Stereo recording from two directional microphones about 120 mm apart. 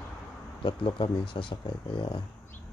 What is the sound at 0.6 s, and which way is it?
Speech, 45° left (ahead or behind).